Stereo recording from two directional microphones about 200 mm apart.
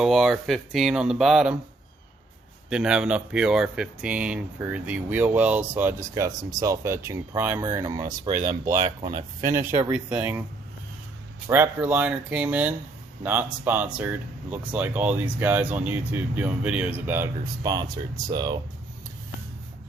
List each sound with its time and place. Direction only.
0.0 s speech: centre (ahead or behind)
2.6 s speech: 5° right (ahead or behind); by 9.5 s 25° right (ahead or behind)
9.6 s speech: 10° right (ahead or behind)
11.4 s speech: 10° right (ahead or behind)